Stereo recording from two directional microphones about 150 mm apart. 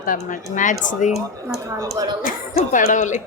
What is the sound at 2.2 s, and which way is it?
Speech, 60° left (ahead or behind).